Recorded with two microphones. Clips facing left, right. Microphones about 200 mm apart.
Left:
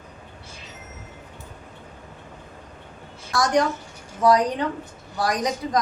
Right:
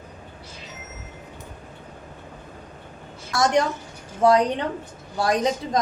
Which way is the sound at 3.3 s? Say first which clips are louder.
Right 1 dB; 25° right (ahead or behind).